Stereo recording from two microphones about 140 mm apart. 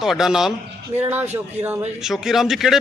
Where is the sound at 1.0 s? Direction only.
15° right (ahead or behind).